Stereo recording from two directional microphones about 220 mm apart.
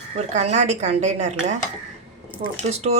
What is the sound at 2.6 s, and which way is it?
Speech, 30° right (ahead or behind).